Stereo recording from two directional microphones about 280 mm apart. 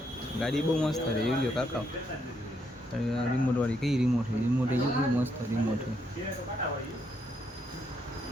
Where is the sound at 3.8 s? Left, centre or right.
Centre.